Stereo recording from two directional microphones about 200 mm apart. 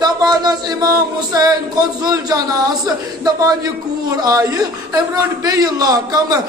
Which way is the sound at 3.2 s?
20° right (ahead or behind).